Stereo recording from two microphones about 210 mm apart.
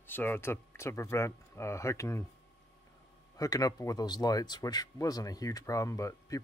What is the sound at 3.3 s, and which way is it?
Speech, 15° left (ahead or behind).